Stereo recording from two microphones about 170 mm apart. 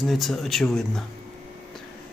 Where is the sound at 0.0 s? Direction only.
Centre (ahead or behind).